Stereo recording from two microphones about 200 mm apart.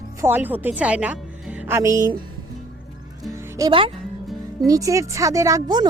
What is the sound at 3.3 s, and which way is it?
Music, 15° right (ahead or behind).